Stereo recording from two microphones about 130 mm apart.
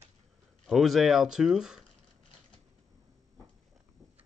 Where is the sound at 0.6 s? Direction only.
Centre (ahead or behind).